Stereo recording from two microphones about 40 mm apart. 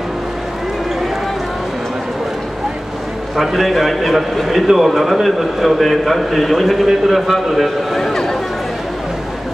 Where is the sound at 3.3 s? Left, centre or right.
Centre.